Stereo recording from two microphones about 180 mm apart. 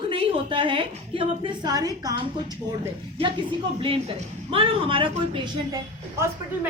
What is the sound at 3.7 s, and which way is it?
A woman's voice, 30° right (ahead or behind).